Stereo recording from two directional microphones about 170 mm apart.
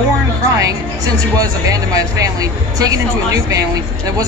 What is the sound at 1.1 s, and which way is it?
Speech, 20° right (ahead or behind).